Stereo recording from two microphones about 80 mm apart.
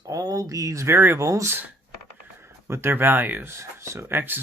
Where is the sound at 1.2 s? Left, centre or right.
Right.